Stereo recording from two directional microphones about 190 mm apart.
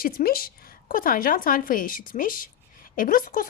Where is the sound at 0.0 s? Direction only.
50° left (ahead or behind).